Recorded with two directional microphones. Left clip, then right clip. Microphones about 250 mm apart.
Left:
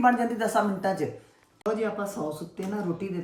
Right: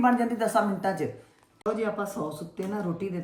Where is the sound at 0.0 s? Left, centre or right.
Centre.